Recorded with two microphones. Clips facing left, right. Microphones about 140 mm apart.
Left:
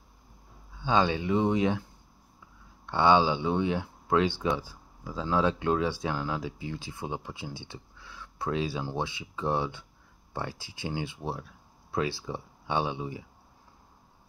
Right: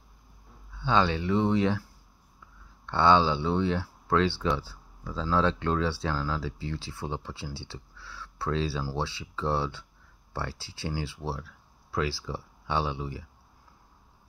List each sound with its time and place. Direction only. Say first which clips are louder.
0.7 s speech: even; 15° left (ahead or behind)
2.9 s speech: even; 15° left (ahead or behind)